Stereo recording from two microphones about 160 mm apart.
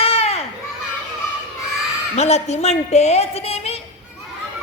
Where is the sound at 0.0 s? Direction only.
40° left (ahead or behind).